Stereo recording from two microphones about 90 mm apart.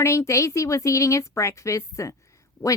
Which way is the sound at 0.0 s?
30° left (ahead or behind).